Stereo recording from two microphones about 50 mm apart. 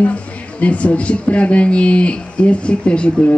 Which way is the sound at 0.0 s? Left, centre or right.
Left.